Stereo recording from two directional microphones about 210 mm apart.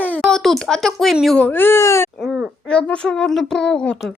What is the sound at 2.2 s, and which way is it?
A woman's voice, centre (ahead or behind).